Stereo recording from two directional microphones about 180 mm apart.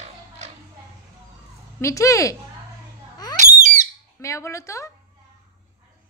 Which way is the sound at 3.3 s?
40° right (ahead or behind).